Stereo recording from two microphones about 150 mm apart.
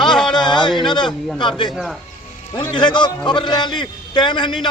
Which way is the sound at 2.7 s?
30° left (ahead or behind).